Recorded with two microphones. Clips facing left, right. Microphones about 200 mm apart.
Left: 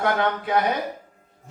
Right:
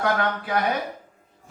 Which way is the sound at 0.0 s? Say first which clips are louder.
Left 1 dB; 25° left (ahead or behind).